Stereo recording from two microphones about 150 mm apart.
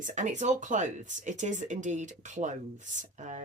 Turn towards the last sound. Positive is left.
turn(degrees=-55)  # may be behind; listen again after turning